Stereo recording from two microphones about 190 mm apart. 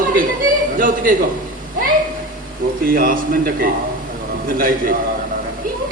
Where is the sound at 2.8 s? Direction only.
50° right (ahead or behind).